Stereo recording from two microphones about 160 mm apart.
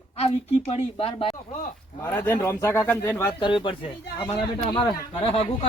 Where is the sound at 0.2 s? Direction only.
40° left (ahead or behind).